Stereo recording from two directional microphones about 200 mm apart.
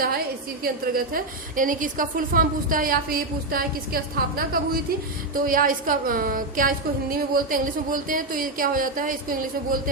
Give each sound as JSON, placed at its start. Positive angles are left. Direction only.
{"t": 0.6, "sound": "a woman's voice", "side_deg": -45}